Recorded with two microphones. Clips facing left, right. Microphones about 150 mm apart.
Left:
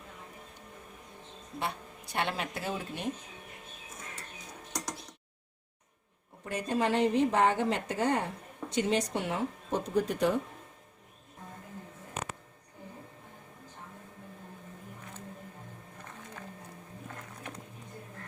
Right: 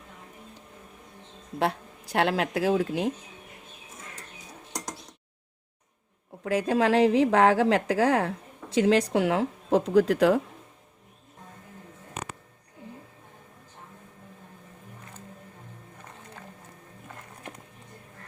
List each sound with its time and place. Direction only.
2.1 s speech: 90° right
6.4 s speech: 90° right